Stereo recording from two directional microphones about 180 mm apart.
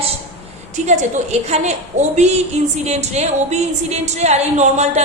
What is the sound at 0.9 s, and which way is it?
A woman's voice, 40° right (ahead or behind).